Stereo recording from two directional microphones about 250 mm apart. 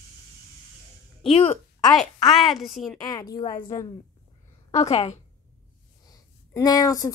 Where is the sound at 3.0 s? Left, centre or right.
Centre.